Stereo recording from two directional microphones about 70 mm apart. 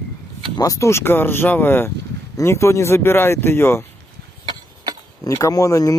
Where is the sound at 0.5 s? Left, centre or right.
Left.